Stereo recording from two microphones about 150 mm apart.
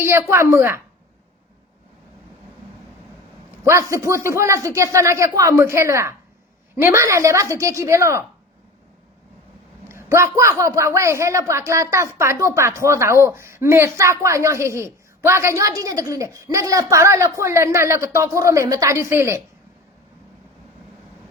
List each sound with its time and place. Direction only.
0.0 s a woman's voice: 15° right (ahead or behind)
3.6 s a man's voice: 20° right (ahead or behind)
9.9 s a man's voice: 20° right (ahead or behind)